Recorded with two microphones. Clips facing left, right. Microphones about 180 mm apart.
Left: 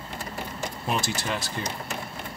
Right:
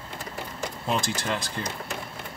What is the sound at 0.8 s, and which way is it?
Speech, 5° left (ahead or behind).